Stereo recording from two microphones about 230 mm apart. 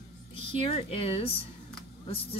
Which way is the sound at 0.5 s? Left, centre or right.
Left.